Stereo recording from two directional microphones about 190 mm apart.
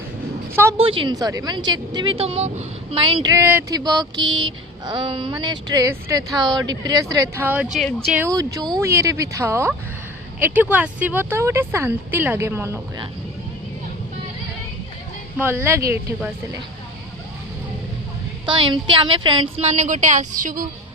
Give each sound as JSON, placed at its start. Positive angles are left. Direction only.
{"t": 0.5, "sound": "a sound", "side_deg": -10}
{"t": 0.8, "sound": "speech", "side_deg": -30}
{"t": 8.2, "sound": "speech", "side_deg": -20}
{"t": 15.4, "sound": "speech", "side_deg": -10}
{"t": 18.4, "sound": "speech", "side_deg": -25}